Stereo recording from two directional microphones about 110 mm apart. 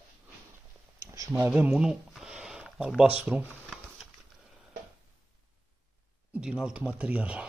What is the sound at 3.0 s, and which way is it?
Shuffling cards, 10° right (ahead or behind).